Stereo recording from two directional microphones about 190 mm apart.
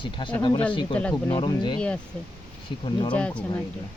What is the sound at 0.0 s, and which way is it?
Speech, 25° left (ahead or behind).